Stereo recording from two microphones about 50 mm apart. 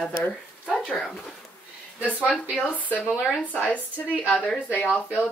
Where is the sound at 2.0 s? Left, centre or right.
Left.